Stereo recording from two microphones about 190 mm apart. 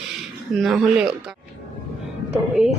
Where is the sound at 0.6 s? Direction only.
Centre (ahead or behind).